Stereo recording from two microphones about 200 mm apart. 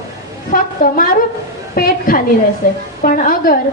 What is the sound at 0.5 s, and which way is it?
A woman's voice, 45° left (ahead or behind).